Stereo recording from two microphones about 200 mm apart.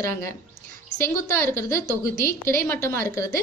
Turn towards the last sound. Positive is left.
turn(degrees=15)  # may be behind; listen again after turning